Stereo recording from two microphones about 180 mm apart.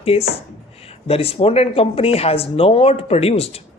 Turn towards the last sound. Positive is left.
turn(degrees=35)  # may be behind; listen again after turning